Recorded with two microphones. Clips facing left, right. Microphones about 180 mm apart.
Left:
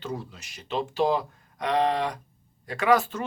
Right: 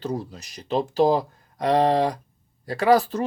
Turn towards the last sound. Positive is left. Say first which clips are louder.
# right 4 dB
turn(degrees=-35)  # may be behind; listen again after turning